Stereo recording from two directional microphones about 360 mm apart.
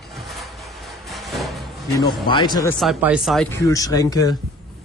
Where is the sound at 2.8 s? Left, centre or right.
Centre.